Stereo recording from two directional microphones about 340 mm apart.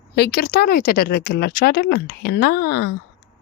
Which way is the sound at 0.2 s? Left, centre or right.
Left.